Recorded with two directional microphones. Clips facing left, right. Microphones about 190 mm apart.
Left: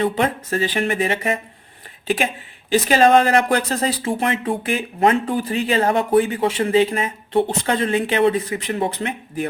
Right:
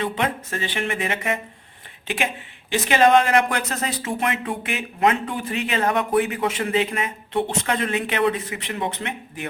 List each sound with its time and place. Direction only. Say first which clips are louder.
0.0 s speech: left 5 dB; 35° left (ahead or behind)